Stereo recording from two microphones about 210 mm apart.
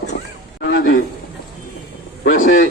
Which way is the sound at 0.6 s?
55° left (ahead or behind).